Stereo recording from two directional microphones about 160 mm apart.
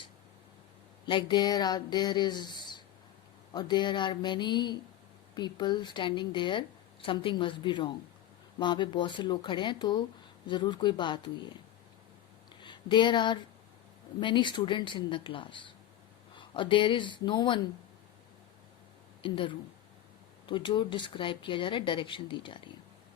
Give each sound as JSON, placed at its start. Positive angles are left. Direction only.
{"t": 1.0, "sound": "a woman's voice", "side_deg": 30}
{"t": 12.6, "sound": "speech", "side_deg": 30}
{"t": 19.2, "sound": "speech", "side_deg": 30}